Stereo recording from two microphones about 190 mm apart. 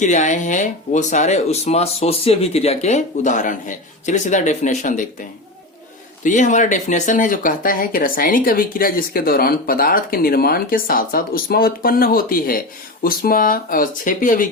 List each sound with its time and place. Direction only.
0.0 s speech: 40° left (ahead or behind)
6.2 s speech: 40° left (ahead or behind)